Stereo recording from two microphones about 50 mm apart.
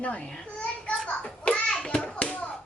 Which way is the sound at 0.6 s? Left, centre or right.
Left.